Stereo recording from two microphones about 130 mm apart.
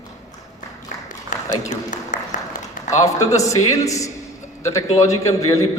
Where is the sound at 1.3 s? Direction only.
85° left.